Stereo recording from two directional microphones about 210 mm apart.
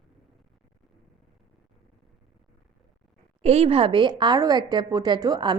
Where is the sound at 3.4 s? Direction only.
30° right (ahead or behind).